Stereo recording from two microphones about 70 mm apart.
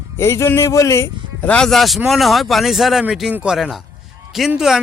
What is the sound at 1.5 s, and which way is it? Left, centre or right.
Speech, centre.